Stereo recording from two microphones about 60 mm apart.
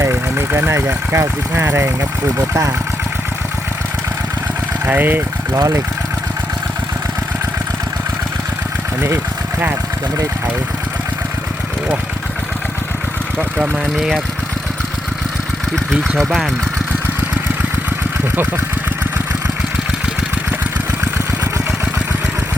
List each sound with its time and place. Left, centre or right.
0.1 s speech: right
2.5 s speech: right
4.9 s speech: right
9.0 s speech: right
13.6 s speech: centre